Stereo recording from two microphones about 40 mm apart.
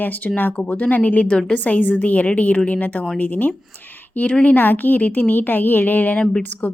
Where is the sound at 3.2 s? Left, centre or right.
Left.